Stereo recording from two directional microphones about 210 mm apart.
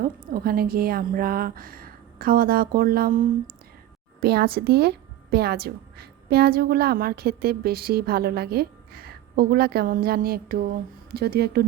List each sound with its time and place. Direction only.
0.0 s a woman's voice: 45° right (ahead or behind)